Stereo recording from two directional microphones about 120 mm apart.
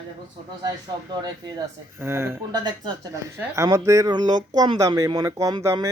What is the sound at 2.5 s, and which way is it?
Speech, 35° right (ahead or behind).